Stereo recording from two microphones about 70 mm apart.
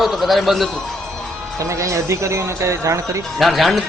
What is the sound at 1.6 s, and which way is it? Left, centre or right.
Speech, right.